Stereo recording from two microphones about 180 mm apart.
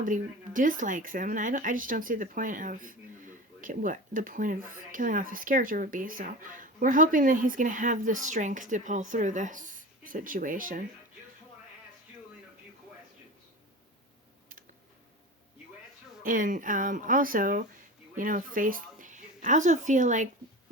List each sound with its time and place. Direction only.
0.0 s speech: 45° right (ahead or behind)
16.2 s speech: 50° right (ahead or behind)